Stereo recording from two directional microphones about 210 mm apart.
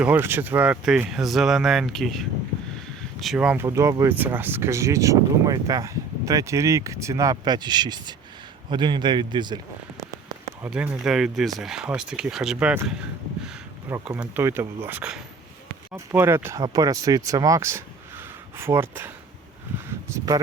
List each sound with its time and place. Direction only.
0.0 s a man's voice: 10° right (ahead or behind)
10.0 s rain on surface: 15° right (ahead or behind)
10.7 s speech: 5° right (ahead or behind)